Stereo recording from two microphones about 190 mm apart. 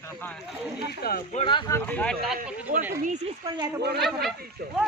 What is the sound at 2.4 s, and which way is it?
Speech, 45° right (ahead or behind).